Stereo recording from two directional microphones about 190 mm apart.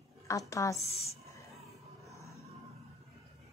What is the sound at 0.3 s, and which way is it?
Speech, 15° left (ahead or behind).